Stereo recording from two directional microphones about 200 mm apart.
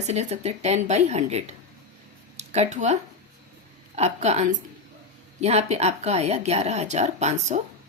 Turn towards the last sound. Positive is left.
turn(degrees=-35)  # may be behind; listen again after turning